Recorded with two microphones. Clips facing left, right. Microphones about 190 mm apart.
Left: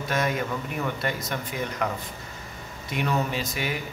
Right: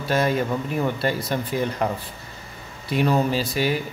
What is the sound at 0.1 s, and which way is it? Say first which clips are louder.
Speech: right 6 dB; 30° right (ahead or behind).